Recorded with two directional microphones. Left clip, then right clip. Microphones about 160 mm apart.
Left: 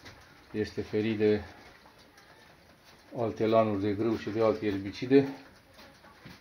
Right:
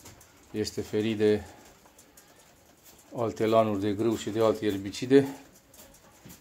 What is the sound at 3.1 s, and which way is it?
Speech, 10° right (ahead or behind).